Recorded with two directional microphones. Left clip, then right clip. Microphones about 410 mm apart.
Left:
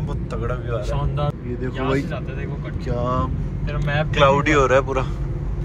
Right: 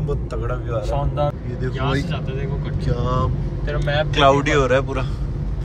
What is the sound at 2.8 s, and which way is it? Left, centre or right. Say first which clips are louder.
Speech: even; centre.